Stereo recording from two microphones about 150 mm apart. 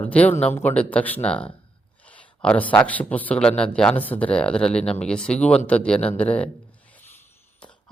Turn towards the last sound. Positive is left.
turn(degrees=10)  # may be behind; listen again after turning